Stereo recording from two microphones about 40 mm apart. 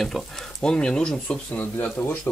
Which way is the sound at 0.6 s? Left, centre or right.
Left.